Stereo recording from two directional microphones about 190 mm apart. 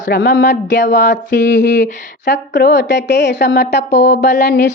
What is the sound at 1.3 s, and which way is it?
Speech, 70° left (ahead or behind).